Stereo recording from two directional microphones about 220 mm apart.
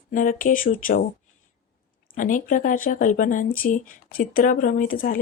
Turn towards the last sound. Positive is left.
turn(degrees=40)  # may be behind; listen again after turning